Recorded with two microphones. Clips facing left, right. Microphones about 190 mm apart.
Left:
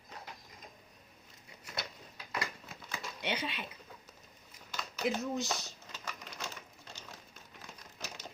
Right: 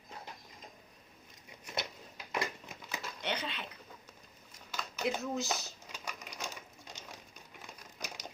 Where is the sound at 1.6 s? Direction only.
20° right (ahead or behind).